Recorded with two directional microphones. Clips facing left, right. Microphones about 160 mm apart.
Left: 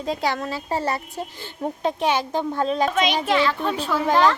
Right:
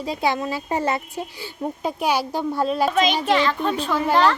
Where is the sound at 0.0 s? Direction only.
5° right (ahead or behind).